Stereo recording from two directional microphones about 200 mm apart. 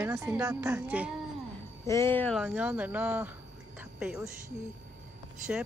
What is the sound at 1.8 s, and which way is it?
Speech, 15° left (ahead or behind).